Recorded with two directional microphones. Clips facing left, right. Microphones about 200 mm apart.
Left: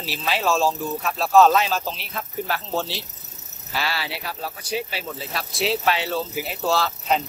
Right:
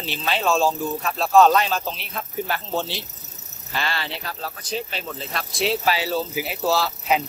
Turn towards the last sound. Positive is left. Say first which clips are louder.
# right 1 dB
turn(degrees=-5)  # may be behind; listen again after turning